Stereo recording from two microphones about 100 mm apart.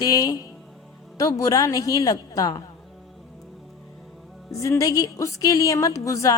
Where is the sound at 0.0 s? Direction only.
40° left (ahead or behind).